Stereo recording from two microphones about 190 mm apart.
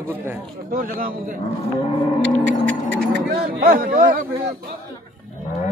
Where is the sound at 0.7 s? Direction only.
45° right (ahead or behind).